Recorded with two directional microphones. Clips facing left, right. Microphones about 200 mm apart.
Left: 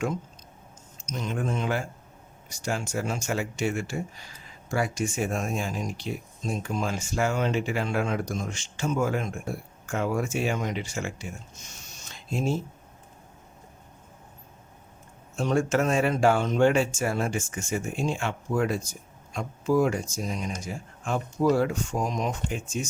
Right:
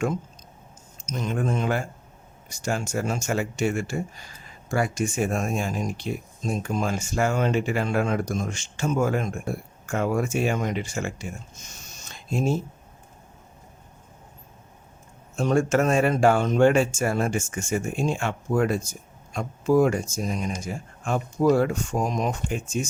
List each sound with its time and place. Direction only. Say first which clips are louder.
1.0 s speech: right 3 dB; 50° right (ahead or behind)
12.0 s a sound: right 3 dB; 45° right (ahead or behind)
15.4 s speech: right 3 dB; 45° right (ahead or behind)